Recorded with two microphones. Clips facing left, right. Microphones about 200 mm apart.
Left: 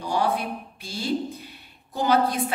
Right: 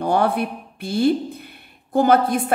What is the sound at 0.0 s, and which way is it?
A woman's voice, 55° right (ahead or behind).